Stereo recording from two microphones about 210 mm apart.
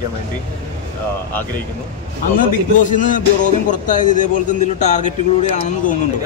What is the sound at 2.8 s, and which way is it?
Speech, 35° left (ahead or behind).